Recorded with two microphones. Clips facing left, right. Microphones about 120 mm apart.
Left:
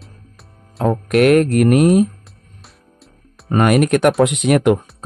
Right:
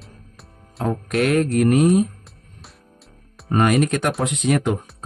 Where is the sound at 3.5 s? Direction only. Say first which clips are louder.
Left 4 dB; 65° left (ahead or behind).